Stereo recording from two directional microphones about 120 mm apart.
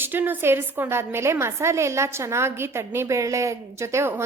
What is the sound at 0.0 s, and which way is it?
A woman's voice, 15° right (ahead or behind).